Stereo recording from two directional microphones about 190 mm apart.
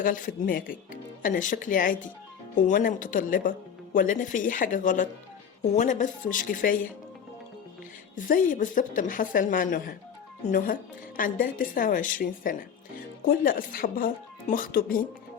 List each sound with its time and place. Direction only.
0.0 s a woman's voice: 45° left (ahead or behind)
8.1 s a woman's voice: 45° left (ahead or behind)
11.2 s a woman's voice: 45° left (ahead or behind)